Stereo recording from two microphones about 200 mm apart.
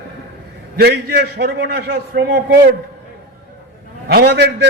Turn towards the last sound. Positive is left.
turn(degrees=-55)  # may be behind; listen again after turning